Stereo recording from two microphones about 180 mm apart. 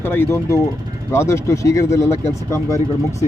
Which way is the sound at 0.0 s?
10° left (ahead or behind).